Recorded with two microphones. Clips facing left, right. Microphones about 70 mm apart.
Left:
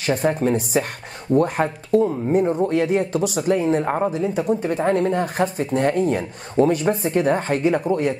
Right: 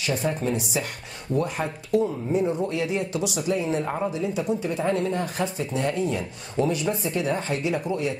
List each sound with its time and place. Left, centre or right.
0.0 s speech: left